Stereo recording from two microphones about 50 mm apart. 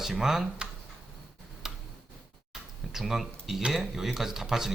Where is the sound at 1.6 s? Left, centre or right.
Centre.